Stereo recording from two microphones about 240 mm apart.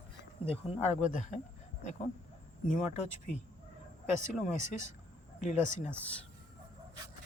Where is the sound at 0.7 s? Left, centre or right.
Left.